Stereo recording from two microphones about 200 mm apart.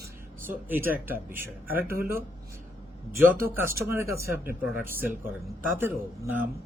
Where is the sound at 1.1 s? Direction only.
10° right (ahead or behind).